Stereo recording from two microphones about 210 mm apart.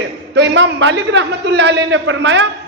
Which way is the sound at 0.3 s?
55° right (ahead or behind).